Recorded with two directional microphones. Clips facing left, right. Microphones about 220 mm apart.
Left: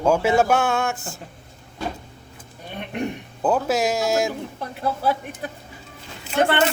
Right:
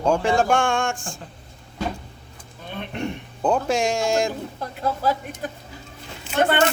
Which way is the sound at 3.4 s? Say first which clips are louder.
Even; 5° left (ahead or behind).